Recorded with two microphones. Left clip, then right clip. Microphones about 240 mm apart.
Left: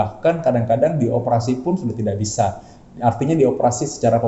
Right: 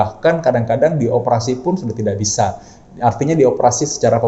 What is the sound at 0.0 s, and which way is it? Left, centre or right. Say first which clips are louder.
Speech: right 3 dB; centre.